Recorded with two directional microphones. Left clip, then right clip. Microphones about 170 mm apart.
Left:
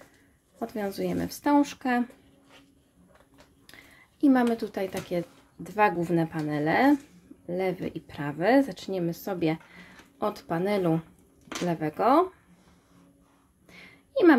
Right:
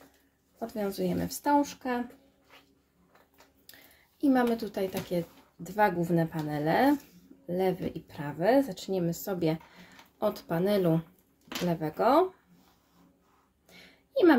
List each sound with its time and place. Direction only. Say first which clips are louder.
0.6 s speech: left 1 dB; 15° left (ahead or behind)
4.2 s speech: left 3 dB; 15° left (ahead or behind)
13.7 s a sound: left 4 dB; 15° left (ahead or behind)